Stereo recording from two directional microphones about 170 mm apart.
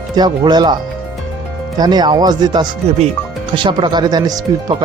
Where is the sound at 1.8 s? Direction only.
25° right (ahead or behind).